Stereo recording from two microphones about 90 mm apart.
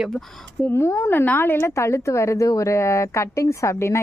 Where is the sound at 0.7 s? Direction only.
30° left (ahead or behind).